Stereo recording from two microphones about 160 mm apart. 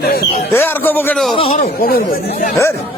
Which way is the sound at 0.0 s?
70° left (ahead or behind).